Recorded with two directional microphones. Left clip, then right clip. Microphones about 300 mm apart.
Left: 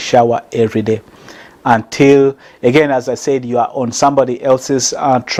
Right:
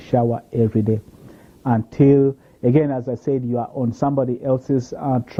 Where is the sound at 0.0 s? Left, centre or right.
Centre.